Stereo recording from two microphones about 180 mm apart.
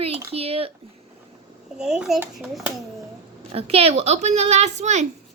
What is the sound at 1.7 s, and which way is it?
Speech, 5° right (ahead or behind).